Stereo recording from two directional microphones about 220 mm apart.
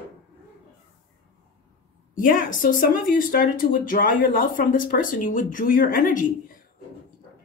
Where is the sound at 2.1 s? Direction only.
40° left (ahead or behind).